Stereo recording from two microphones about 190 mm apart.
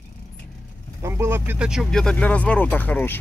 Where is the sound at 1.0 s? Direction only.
15° right (ahead or behind).